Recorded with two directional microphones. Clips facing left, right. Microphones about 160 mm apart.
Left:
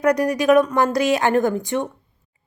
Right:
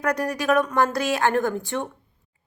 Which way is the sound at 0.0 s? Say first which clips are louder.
Left 7 dB; 15° left (ahead or behind).